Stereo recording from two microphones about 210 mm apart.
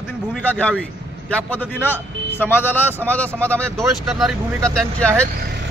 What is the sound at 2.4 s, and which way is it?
Speech, 10° left (ahead or behind).